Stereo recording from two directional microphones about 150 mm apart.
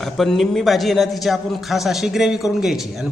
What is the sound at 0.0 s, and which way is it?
A man's voice, centre (ahead or behind).